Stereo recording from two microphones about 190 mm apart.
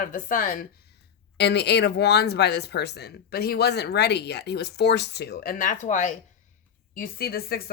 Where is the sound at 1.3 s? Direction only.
60° left (ahead or behind); by 6.1 s 40° left (ahead or behind).